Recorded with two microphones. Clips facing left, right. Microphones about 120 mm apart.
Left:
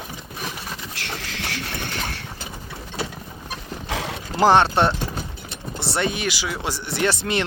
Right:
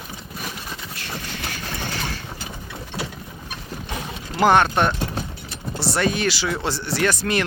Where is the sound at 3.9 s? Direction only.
90° left.